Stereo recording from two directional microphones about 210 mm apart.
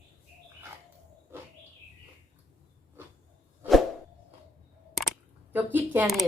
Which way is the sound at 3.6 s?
Centre (ahead or behind).